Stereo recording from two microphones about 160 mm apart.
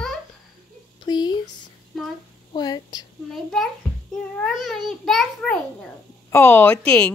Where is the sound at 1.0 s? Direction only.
25° left (ahead or behind).